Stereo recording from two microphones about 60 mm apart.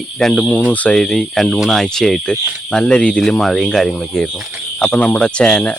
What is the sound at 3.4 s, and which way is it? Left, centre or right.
Speech, centre.